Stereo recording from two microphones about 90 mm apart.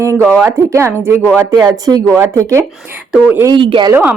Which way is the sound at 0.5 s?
35° right (ahead or behind).